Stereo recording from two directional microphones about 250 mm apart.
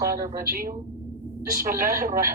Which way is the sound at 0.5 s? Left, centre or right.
Right.